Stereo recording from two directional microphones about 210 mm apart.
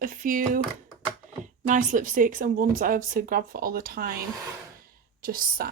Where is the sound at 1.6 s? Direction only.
40° right (ahead or behind).